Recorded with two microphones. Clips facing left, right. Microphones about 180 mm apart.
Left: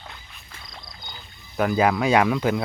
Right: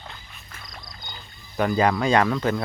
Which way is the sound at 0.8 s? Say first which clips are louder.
Even; centre (ahead or behind).